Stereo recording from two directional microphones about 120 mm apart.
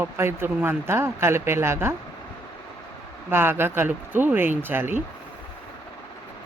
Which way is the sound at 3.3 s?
20° right (ahead or behind).